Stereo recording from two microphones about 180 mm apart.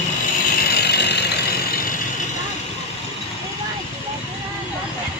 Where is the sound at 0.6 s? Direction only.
65° left (ahead or behind).